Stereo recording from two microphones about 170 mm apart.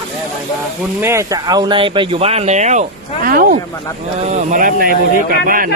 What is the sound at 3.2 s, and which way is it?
Speech, 60° right (ahead or behind).